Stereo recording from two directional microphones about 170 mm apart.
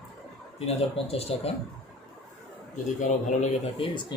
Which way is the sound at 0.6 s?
35° left (ahead or behind).